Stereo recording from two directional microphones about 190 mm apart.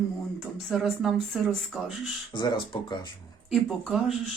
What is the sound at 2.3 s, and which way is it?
Speech, 25° left (ahead or behind).